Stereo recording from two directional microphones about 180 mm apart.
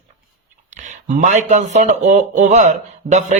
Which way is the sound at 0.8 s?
45° right (ahead or behind).